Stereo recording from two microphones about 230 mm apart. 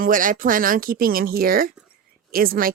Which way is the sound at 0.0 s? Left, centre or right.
Right.